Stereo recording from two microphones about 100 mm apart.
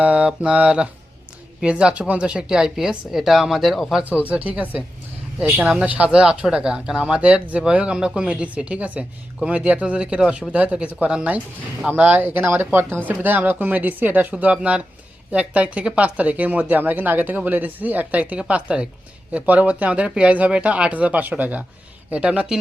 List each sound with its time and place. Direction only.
0.0 s speech: 10° right (ahead or behind)
4.3 s speech: 15° right (ahead or behind)